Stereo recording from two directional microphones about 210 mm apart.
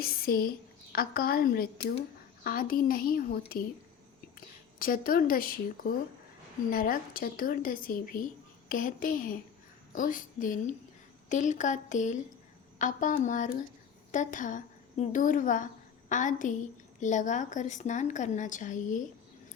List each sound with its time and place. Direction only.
0.0 s a woman's voice: 45° left (ahead or behind)
4.4 s a woman's voice: 45° left (ahead or behind)